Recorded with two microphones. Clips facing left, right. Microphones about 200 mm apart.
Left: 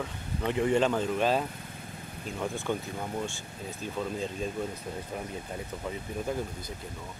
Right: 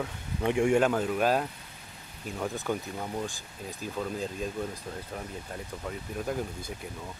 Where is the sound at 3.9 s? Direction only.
Centre (ahead or behind).